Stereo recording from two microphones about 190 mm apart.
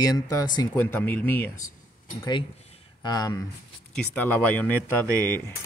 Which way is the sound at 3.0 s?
20° left (ahead or behind).